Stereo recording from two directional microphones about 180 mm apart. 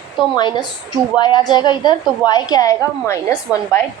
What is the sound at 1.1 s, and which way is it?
A woman's voice, 25° left (ahead or behind).